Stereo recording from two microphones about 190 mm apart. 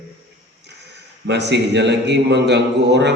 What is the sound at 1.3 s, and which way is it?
A man's voice, 65° right (ahead or behind).